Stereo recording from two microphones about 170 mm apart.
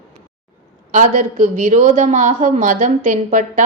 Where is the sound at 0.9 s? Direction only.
45° right (ahead or behind).